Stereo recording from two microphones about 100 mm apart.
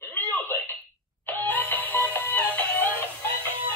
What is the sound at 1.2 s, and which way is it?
Music, 15° left (ahead or behind).